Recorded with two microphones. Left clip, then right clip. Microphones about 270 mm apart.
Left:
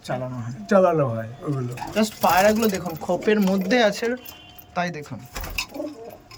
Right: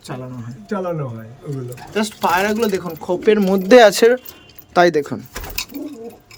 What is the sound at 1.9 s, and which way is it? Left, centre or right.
Speech, centre.